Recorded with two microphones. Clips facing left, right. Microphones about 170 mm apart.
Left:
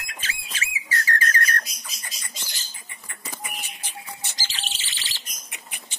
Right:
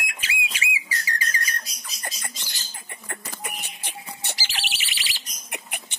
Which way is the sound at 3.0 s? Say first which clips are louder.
Right 2 dB; 60° right (ahead or behind).